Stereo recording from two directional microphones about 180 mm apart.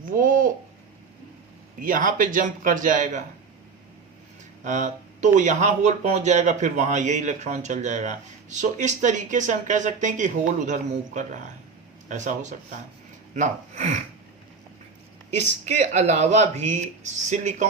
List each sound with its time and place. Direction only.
0.0 s a sound: 50° right (ahead or behind)
1.8 s speech: 50° right (ahead or behind)
4.6 s speech: 45° right (ahead or behind)
15.6 s speech: 40° right (ahead or behind)